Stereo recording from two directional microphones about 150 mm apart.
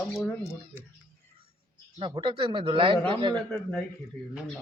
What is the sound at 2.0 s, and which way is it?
Speech, 35° right (ahead or behind).